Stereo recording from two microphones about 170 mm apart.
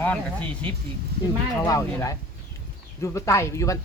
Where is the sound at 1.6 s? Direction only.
20° left (ahead or behind).